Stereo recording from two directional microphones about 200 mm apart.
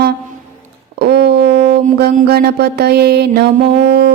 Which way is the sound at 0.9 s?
55° right (ahead or behind).